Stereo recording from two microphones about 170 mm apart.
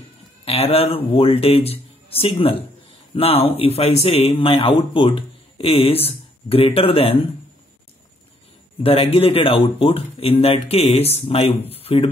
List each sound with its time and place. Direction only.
0.5 s speech: 35° left (ahead or behind)
8.8 s speech: 35° left (ahead or behind)